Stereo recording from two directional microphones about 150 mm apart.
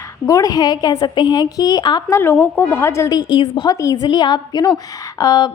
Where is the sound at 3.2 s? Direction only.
35° left (ahead or behind).